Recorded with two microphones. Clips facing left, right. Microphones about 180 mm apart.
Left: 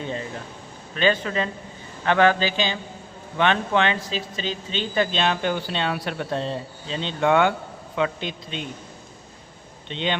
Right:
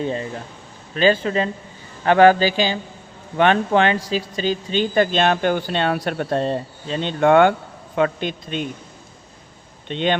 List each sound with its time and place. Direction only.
0.9 s a man's voice: 35° right (ahead or behind); by 8.6 s 50° right (ahead or behind)
9.9 s speech: 50° right (ahead or behind)